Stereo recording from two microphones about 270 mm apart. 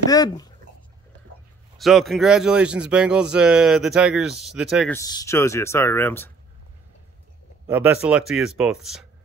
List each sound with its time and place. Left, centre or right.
0.1 s speech: centre
1.8 s speech: centre
4.9 s speech: centre
7.6 s speech: centre